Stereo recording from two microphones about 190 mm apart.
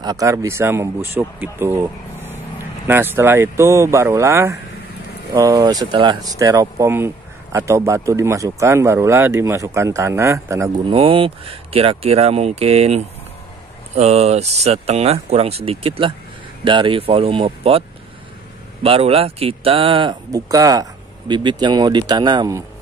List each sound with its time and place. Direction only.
0.0 s speech: 20° right (ahead or behind)
10.9 s speech: 30° right (ahead or behind)